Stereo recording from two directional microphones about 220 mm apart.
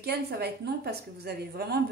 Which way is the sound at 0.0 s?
45° right (ahead or behind).